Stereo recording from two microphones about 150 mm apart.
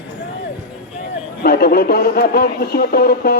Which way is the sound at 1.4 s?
90° left.